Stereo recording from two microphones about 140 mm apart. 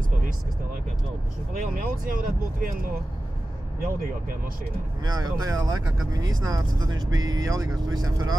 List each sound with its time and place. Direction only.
1.5 s speech: 80° right
5.0 s speech: 30° right (ahead or behind)